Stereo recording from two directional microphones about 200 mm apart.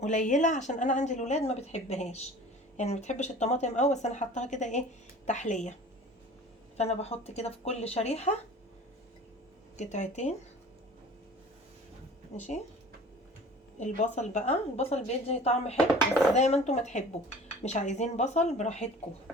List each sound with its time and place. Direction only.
0.0 s speech: 40° left (ahead or behind)
6.7 s speech: 30° left (ahead or behind)
9.7 s speech: 35° left (ahead or behind)
13.7 s speech: 35° left (ahead or behind)